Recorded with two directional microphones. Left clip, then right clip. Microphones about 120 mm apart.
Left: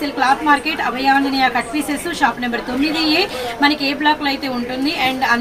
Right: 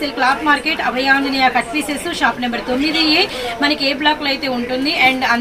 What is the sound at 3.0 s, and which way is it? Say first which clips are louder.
A woman's voice: right 2 dB; 20° left (ahead or behind).